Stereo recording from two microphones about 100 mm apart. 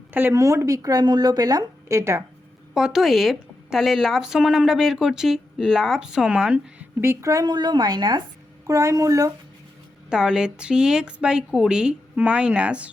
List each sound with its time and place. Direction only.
0.1 s speech: 20° right (ahead or behind)
0.3 s a woman's voice: 30° right (ahead or behind)
2.7 s a woman's voice: 5° right (ahead or behind)
7.0 s speech: 25° right (ahead or behind); by 8.2 s 45° right (ahead or behind)
8.6 s a woman's voice: 30° right (ahead or behind)
10.1 s a woman's voice: 5° right (ahead or behind)